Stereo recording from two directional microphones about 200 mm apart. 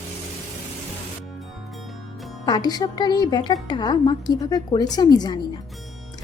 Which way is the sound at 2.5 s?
20° left (ahead or behind).